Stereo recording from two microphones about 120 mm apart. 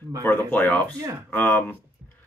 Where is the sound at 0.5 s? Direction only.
10° left (ahead or behind).